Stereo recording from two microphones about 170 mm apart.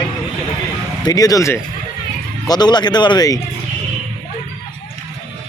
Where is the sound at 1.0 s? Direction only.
20° left (ahead or behind).